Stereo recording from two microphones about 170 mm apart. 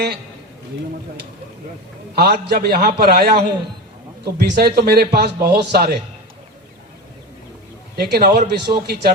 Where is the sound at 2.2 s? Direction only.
70° right (ahead or behind).